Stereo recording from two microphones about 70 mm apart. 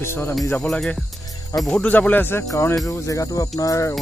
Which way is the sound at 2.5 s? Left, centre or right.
Left.